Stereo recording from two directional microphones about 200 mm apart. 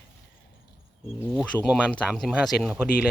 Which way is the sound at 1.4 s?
5° right (ahead or behind).